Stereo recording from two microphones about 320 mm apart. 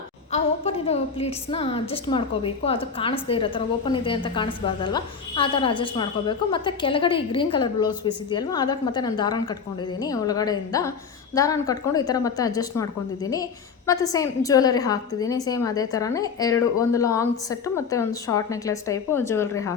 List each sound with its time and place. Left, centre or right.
0.3 s a woman's voice: centre